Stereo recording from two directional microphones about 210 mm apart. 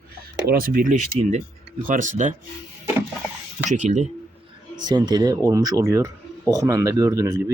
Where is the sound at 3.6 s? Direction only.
35° right (ahead or behind).